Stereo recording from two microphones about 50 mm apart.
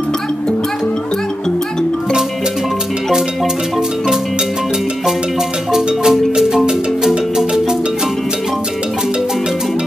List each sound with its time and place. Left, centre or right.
5.7 s marimba: centre